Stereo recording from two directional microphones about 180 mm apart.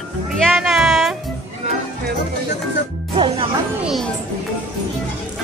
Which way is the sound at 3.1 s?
30° right (ahead or behind).